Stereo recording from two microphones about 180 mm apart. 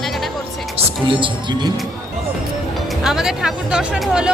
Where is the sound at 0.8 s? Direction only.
30° right (ahead or behind).